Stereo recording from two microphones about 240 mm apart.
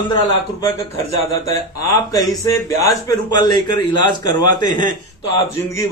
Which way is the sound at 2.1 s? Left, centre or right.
Centre.